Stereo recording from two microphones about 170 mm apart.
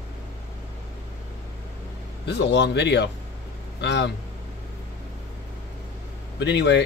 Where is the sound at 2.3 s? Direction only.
90° left.